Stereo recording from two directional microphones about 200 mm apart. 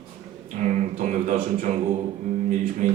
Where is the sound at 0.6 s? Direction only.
40° right (ahead or behind).